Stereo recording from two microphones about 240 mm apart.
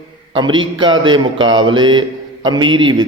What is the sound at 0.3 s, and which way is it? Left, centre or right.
Speech, centre.